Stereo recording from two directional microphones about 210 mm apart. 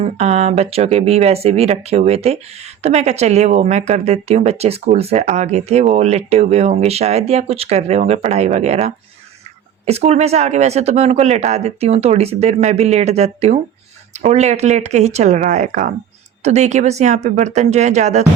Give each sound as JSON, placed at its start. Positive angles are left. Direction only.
{"t": 0.0, "sound": "a woman's voice", "side_deg": -30}